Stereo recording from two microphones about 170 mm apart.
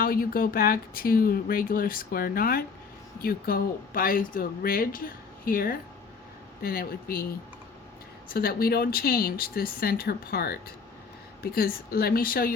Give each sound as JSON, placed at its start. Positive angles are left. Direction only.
{"t": 0.0, "sound": "speech", "side_deg": 60}